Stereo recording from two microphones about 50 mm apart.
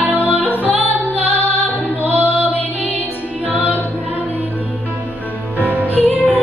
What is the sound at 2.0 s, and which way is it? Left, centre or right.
Music, right.